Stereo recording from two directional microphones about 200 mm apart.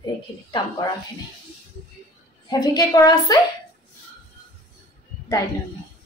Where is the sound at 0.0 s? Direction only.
20° left (ahead or behind).